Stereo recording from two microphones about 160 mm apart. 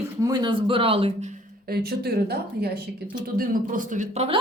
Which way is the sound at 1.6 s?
80° right.